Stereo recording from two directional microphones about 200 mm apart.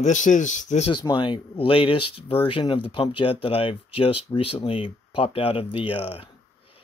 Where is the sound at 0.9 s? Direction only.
25° left (ahead or behind).